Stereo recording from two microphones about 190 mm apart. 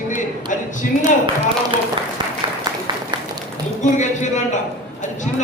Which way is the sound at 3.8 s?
40° left (ahead or behind).